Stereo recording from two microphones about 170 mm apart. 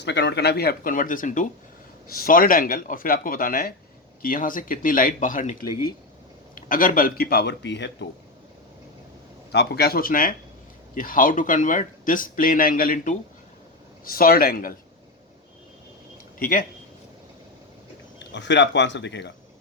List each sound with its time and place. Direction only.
0.0 s speech: 90° left
9.5 s speech: 75° left (ahead or behind)
16.4 s speech: 55° left (ahead or behind)
18.2 s speech: 90° left